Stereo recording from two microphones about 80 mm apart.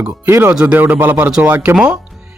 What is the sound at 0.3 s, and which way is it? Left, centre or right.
Speech, right.